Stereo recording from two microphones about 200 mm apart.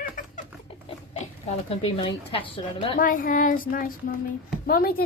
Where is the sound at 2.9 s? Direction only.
45° left (ahead or behind).